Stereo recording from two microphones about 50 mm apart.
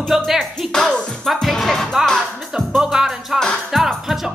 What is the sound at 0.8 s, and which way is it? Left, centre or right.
Music, centre.